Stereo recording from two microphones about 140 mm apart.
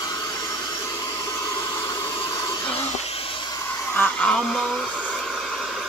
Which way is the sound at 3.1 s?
40° left (ahead or behind).